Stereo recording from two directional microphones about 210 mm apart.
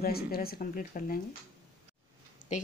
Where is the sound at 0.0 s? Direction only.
45° left (ahead or behind).